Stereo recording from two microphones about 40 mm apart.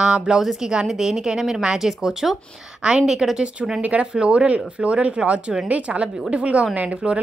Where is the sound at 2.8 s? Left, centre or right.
Centre.